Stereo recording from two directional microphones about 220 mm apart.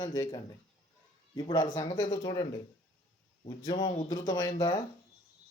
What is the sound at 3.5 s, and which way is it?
Speech, 20° left (ahead or behind).